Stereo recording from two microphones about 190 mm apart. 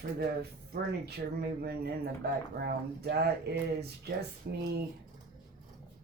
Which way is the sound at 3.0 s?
60° right (ahead or behind).